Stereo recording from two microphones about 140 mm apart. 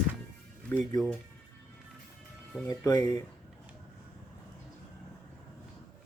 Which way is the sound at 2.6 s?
25° left (ahead or behind).